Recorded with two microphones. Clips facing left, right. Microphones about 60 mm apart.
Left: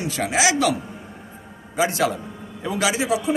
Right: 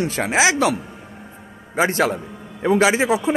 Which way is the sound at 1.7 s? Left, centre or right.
Right.